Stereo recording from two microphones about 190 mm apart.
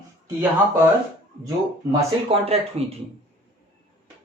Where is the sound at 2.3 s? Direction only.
30° right (ahead or behind).